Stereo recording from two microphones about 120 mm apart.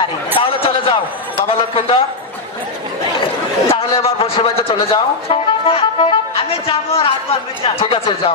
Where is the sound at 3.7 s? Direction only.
55° left (ahead or behind).